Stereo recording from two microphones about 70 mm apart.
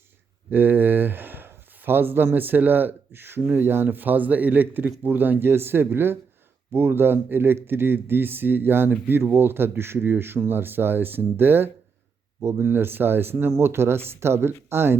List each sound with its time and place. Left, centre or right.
0.5 s speech: right